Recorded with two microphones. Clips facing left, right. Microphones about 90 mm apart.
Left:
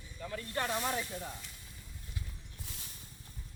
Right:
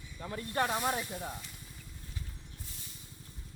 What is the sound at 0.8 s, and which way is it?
Speech, 10° right (ahead or behind).